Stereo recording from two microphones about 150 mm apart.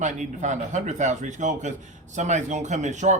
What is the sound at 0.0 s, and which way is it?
Speech, 55° right (ahead or behind).